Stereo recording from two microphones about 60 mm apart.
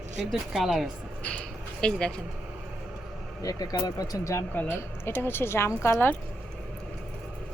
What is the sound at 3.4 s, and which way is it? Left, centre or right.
Speech, left.